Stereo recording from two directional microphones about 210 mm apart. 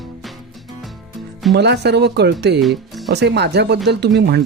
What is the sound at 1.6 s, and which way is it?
Speech, 55° right (ahead or behind).